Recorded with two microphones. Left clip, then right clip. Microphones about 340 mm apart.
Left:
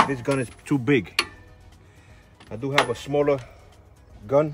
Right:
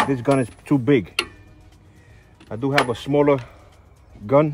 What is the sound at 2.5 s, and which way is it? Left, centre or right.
Speech, centre.